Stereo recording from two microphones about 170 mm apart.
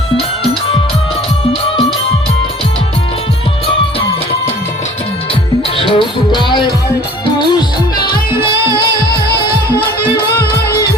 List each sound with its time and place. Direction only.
5.9 s music: 30° left (ahead or behind)
8.0 s music: 60° left (ahead or behind)